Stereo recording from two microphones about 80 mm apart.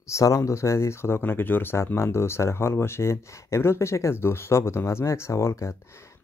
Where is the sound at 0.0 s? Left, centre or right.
Left.